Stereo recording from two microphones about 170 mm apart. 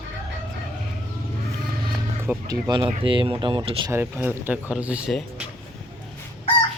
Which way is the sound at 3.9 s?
10° right (ahead or behind).